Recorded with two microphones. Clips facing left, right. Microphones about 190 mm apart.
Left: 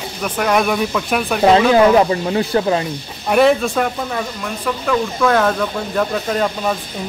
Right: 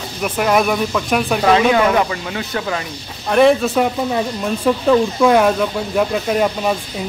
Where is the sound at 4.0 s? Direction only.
20° right (ahead or behind).